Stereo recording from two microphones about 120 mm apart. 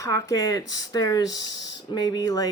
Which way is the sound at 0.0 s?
30° left (ahead or behind).